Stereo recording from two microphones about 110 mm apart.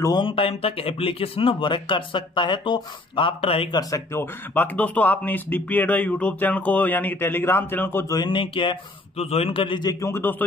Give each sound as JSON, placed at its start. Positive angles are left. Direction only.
{"t": 0.0, "sound": "speech", "side_deg": 40}
{"t": 4.1, "sound": "speech", "side_deg": 20}
{"t": 8.1, "sound": "speech", "side_deg": 45}
{"t": 9.1, "sound": "a man's voice", "side_deg": 70}
{"t": 9.9, "sound": "a man's voice", "side_deg": 25}